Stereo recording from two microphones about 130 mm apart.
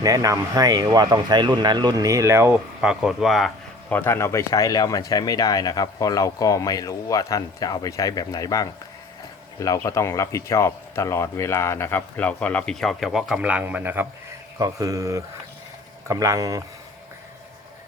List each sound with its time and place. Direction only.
0.0 s speech: 25° right (ahead or behind)
2.8 s speech: 5° right (ahead or behind)
3.8 s speech: 15° left (ahead or behind); by 16.6 s 25° right (ahead or behind)